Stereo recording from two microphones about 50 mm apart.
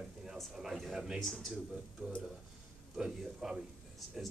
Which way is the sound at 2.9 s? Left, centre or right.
Centre.